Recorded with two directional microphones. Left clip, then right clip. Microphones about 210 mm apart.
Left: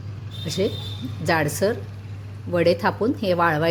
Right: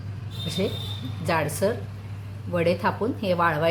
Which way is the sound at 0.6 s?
30° left (ahead or behind).